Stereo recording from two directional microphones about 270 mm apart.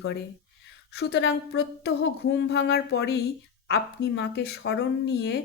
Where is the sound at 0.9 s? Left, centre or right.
Left.